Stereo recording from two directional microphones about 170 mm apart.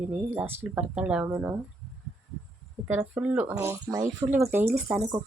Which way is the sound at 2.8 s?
10° right (ahead or behind).